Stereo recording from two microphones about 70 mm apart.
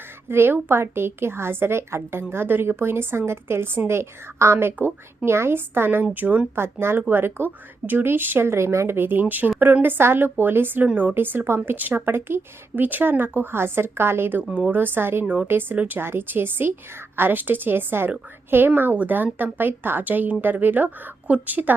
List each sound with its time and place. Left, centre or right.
0.3 s a woman's voice: right
6.6 s a woman's voice: right